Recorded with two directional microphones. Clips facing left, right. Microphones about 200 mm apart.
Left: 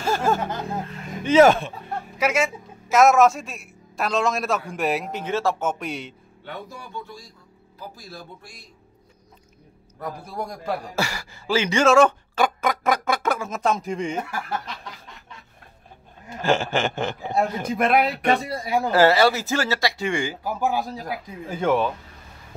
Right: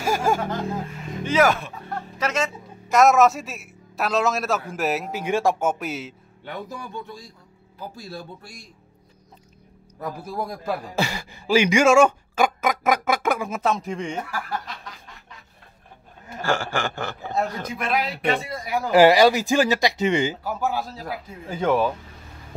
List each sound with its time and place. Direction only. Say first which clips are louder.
0.0 s a sound: even; 10° right (ahead or behind)
1.2 s a man's voice: left 5 dB; 25° left (ahead or behind)
2.1 s a man's voice: left 3 dB; 10° left (ahead or behind)
5.2 s speech: right 4 dB; 15° right (ahead or behind)
10.0 s speech: right 2 dB; 5° right (ahead or behind)
11.0 s speech: right 1 dB; 20° right (ahead or behind); by 14.2 s centre (ahead or behind)
16.3 s a man's voice: left 3 dB; 20° left (ahead or behind)
17.7 s a man's voice: left 6 dB; 55° left (ahead or behind); by 18.9 s 25° left (ahead or behind)
18.9 s speech: right 3 dB; 15° right (ahead or behind)
20.4 s speech: left 2 dB; 15° left (ahead or behind)
21.5 s a man's voice: even; centre (ahead or behind)